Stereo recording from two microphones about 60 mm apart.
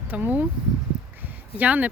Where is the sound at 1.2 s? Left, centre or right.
Right.